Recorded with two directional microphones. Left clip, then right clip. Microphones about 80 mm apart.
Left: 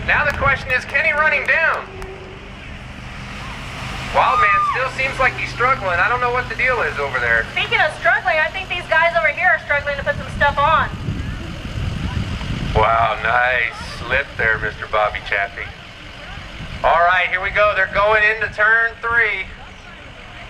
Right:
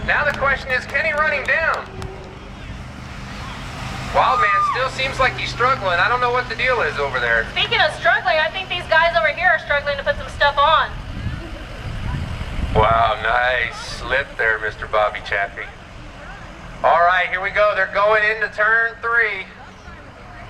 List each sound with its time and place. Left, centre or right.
0.0 s speech: centre
3.8 s speech: centre
4.7 s a woman's voice: centre; by 7.9 s right
7.9 s speech: centre
8.3 s a woman's voice: right
12.7 s speech: centre
16.8 s speech: centre